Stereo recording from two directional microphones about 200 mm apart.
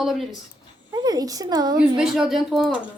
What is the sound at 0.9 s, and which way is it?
Speech, 20° right (ahead or behind).